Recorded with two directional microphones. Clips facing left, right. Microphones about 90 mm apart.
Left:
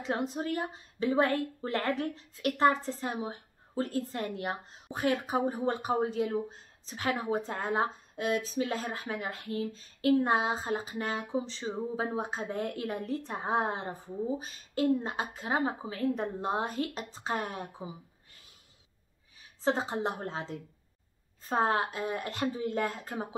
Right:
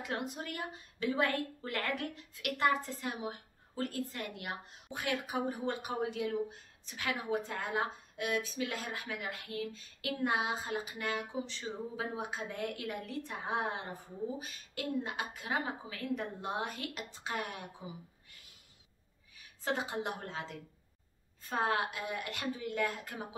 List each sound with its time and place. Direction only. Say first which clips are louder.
0.0 s a woman's voice: left 6 dB; 30° left (ahead or behind)
19.3 s a woman's voice: left 6 dB; 30° left (ahead or behind)